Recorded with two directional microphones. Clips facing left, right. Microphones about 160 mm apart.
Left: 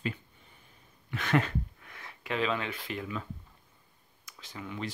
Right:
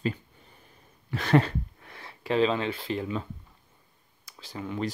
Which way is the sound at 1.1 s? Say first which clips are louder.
Right 5 dB; 35° right (ahead or behind).